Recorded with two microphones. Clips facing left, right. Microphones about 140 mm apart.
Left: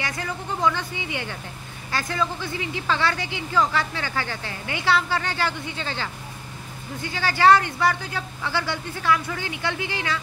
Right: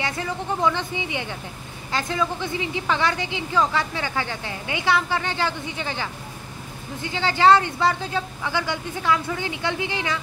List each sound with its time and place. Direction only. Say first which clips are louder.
0.0 s a woman's voice: right 3 dB; 20° right (ahead or behind)